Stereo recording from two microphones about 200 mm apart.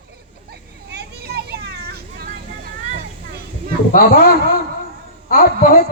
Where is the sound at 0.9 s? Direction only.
55° right (ahead or behind).